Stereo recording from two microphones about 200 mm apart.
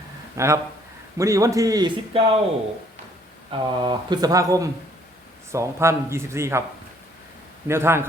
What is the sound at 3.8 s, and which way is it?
A man's voice, 20° right (ahead or behind).